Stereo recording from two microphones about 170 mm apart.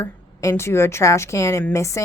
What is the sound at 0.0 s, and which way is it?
A woman's voice, 15° left (ahead or behind).